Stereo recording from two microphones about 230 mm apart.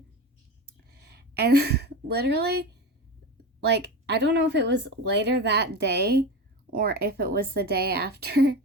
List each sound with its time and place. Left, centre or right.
1.0 s a woman's voice: right